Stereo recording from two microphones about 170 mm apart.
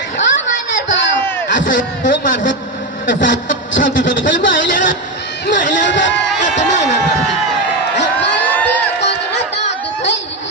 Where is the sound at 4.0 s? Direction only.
90° left.